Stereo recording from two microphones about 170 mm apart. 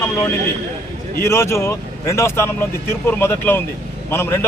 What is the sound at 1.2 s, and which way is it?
Speech, 15° left (ahead or behind).